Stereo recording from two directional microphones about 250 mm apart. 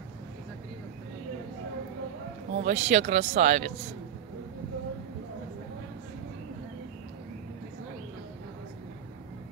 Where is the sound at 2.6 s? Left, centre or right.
Right.